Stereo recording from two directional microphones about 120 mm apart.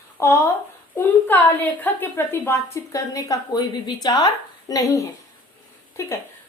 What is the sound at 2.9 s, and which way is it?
A woman's voice, 30° left (ahead or behind).